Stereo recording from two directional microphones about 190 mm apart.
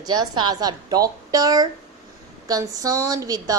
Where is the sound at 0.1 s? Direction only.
20° right (ahead or behind).